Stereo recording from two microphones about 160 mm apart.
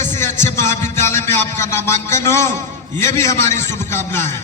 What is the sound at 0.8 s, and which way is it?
Speech, 50° right (ahead or behind).